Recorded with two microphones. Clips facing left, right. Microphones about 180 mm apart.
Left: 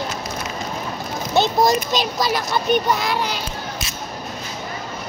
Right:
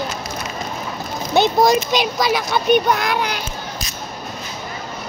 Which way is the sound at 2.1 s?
Centre (ahead or behind).